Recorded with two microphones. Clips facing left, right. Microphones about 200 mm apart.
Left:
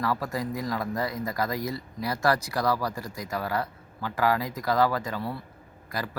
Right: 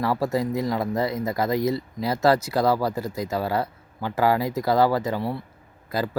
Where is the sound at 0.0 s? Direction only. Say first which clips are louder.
Right 6 dB; 25° right (ahead or behind).